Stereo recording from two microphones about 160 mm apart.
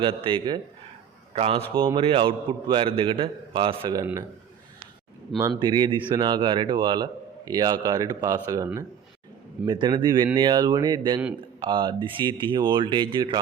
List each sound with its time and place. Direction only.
0.0 s a man's voice: 30° right (ahead or behind)
3.9 s a man's voice: 20° right (ahead or behind)
5.5 s a man's voice: 30° right (ahead or behind)